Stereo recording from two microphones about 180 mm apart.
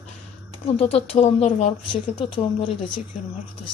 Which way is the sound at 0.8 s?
35° left (ahead or behind).